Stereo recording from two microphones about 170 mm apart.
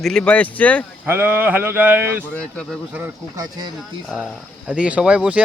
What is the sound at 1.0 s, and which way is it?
Speech, 15° right (ahead or behind).